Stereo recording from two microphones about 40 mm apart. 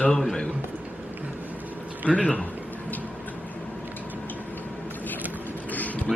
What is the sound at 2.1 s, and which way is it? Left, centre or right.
Speech, left.